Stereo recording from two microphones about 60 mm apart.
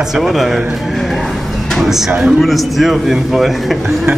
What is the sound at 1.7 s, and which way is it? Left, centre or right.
A man's voice, centre.